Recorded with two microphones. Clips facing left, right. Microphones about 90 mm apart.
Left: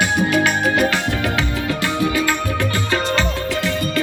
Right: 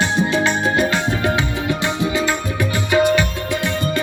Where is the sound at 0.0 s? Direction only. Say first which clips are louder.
Left 1 dB; 25° right (ahead or behind).